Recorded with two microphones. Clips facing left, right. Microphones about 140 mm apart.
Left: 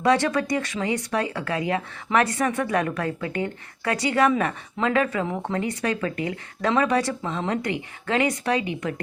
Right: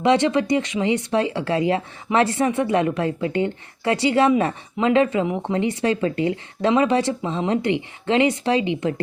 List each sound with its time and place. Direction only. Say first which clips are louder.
0.0 s a woman's voice: right 3 dB; 25° right (ahead or behind)